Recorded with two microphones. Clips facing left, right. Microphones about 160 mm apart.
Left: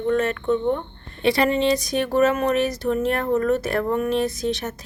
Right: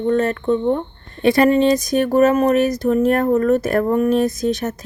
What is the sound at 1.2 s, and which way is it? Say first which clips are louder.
A woman's voice: right 6 dB; 50° right (ahead or behind).